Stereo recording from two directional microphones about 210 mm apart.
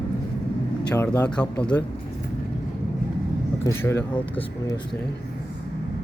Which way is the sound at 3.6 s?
15° left (ahead or behind).